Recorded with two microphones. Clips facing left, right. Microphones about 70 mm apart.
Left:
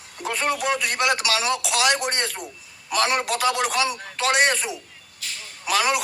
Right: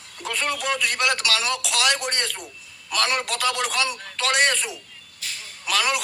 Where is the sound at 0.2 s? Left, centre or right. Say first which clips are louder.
Left 3 dB; centre.